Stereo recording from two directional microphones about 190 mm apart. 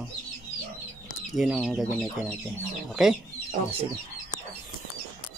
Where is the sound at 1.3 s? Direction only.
Centre (ahead or behind).